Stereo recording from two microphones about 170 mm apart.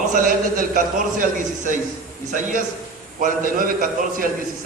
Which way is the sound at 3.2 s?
55° right (ahead or behind).